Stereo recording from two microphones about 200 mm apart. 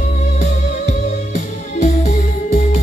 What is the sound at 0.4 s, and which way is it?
Music, 35° left (ahead or behind).